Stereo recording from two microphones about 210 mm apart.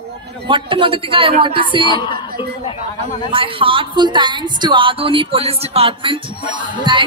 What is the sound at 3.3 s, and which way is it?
A woman's voice, 25° right (ahead or behind).